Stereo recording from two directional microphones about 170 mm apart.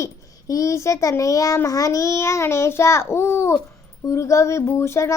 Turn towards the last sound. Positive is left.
turn(degrees=15)  # may be behind; listen again after turning